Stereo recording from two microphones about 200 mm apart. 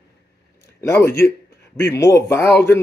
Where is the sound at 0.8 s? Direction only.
15° left (ahead or behind).